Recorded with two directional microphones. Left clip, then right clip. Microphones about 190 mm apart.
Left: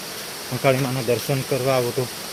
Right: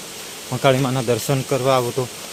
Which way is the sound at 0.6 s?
30° right (ahead or behind).